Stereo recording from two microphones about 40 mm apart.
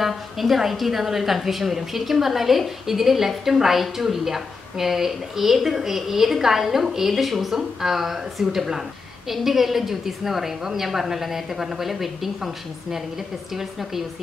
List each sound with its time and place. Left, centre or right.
0.0 s a woman's voice: centre